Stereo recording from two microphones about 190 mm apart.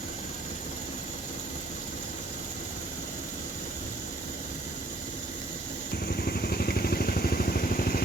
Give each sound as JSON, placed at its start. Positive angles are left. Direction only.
{"t": 6.1, "sound": "vehicle", "side_deg": 55}